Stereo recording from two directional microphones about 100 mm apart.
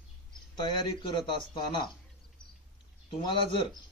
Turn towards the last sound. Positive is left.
turn(degrees=55)  # may be behind; listen again after turning